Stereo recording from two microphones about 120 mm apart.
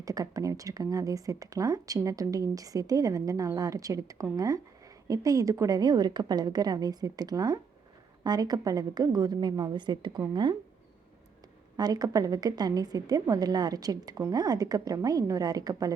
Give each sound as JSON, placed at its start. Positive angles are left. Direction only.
{"t": 0.0, "sound": "a woman's voice", "side_deg": -30}
{"t": 11.8, "sound": "a woman's voice", "side_deg": -35}